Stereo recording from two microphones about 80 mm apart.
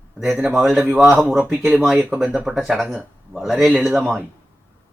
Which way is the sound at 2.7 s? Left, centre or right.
Centre.